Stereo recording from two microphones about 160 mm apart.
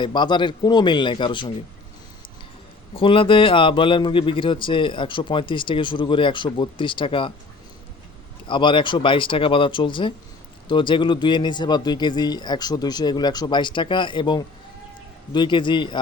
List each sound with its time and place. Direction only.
0.0 s speech: 30° left (ahead or behind)
2.9 s a man's voice: 35° left (ahead or behind)
8.4 s a man's voice: 30° left (ahead or behind)